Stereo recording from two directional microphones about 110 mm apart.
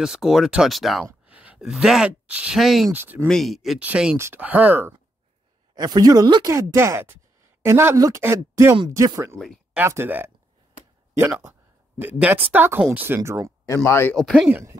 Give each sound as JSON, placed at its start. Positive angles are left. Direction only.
{"t": 0.0, "sound": "speech", "side_deg": -5}
{"t": 1.2, "sound": "a sound", "side_deg": -10}
{"t": 1.6, "sound": "speech", "side_deg": 0}
{"t": 2.9, "sound": "speech", "side_deg": -15}
{"t": 3.3, "sound": "speech", "side_deg": 0}
{"t": 5.8, "sound": "speech", "side_deg": -35}
{"t": 6.5, "sound": "speech", "side_deg": -25}
{"t": 13.8, "sound": "speech", "side_deg": 25}
{"t": 14.1, "sound": "speech", "side_deg": 0}
{"t": 14.5, "sound": "speech", "side_deg": -25}